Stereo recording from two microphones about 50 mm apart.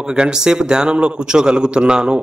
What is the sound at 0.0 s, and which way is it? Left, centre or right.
A man's voice, centre.